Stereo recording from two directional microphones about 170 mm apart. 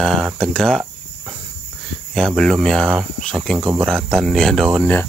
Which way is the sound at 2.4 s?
Centre (ahead or behind).